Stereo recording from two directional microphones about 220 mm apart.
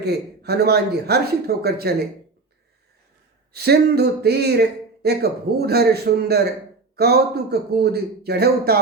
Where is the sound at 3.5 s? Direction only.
45° right (ahead or behind).